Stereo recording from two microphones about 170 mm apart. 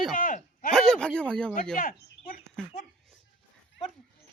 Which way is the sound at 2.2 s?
90° left.